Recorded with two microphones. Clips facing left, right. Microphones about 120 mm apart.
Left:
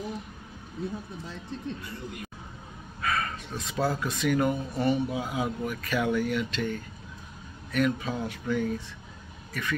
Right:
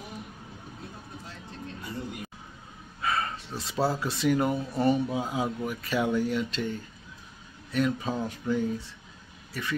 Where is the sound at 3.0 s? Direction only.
25° right (ahead or behind).